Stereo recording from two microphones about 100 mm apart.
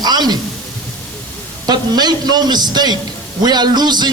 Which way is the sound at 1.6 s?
45° right (ahead or behind).